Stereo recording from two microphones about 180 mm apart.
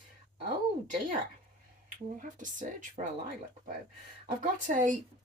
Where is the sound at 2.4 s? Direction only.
45° right (ahead or behind).